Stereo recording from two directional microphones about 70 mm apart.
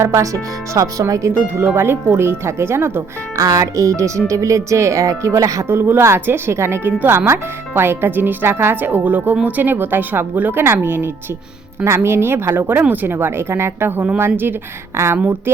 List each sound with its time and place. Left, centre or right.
0.0 s speech: right
1.5 s speech: right
3.6 s speech: right
5.6 s speech: right